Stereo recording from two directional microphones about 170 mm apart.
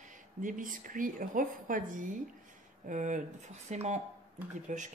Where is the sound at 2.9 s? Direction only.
50° right (ahead or behind).